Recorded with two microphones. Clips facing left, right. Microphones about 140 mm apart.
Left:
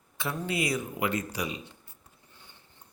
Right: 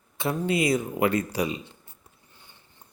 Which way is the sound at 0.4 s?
20° right (ahead or behind).